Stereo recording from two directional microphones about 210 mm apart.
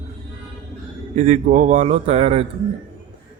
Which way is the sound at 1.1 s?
35° right (ahead or behind).